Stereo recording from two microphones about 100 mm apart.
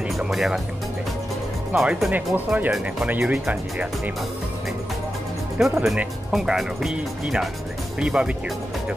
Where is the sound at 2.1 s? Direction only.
15° right (ahead or behind).